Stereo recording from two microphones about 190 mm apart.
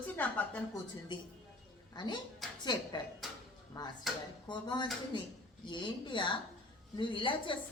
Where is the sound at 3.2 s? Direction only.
Centre (ahead or behind).